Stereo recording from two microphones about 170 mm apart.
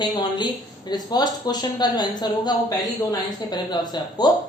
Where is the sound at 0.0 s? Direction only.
25° left (ahead or behind).